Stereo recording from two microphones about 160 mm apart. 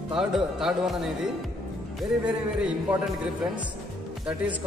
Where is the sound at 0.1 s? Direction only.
5° right (ahead or behind).